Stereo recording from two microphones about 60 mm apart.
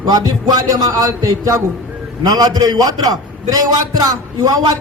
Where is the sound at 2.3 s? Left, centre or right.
Right.